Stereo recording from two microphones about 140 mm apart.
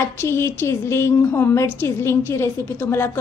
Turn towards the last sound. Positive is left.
turn(degrees=20)  # may be behind; listen again after turning